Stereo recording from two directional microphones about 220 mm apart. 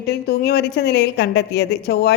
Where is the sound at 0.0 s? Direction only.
50° left (ahead or behind).